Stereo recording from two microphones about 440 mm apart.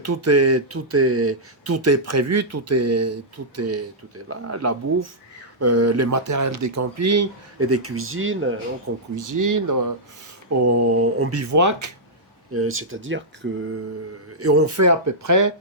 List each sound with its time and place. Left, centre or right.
0.0 s speech: right
9.1 s speech: right
12.5 s speech: right